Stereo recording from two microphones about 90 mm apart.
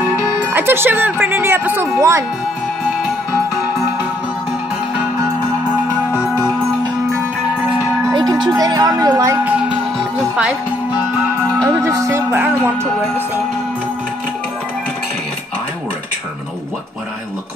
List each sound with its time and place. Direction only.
0.5 s speech: 25° right (ahead or behind)
8.1 s music: 55° right (ahead or behind)
8.5 s speech: 45° right (ahead or behind)
11.6 s speech: 35° right (ahead or behind)
12.3 s speech: 20° right (ahead or behind)